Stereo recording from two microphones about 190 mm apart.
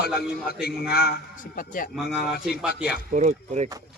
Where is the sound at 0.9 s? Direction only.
55° left (ahead or behind).